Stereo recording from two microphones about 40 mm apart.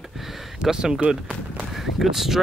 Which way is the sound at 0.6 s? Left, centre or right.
Centre.